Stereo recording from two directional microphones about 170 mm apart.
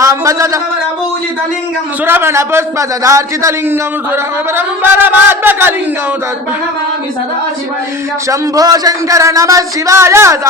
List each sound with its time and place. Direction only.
0.0 s speech: 20° right (ahead or behind)
2.0 s a man's voice: 15° right (ahead or behind)
8.3 s speech: 20° right (ahead or behind)